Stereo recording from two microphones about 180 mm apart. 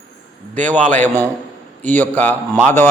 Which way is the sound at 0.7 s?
10° left (ahead or behind).